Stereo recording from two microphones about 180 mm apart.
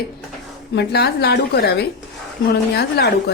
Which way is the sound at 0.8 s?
65° left (ahead or behind).